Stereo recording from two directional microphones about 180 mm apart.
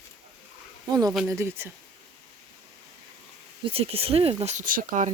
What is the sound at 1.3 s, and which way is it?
Speech, 15° right (ahead or behind).